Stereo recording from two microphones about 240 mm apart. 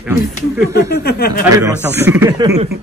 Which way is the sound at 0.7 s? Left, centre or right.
Left.